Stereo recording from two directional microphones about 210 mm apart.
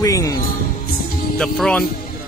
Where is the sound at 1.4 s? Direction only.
5° left (ahead or behind).